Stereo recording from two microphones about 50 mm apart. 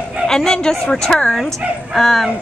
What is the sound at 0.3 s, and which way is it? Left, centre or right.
Speech, centre.